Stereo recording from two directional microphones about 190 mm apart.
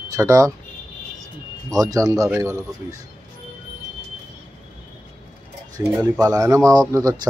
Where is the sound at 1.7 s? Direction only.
20° right (ahead or behind).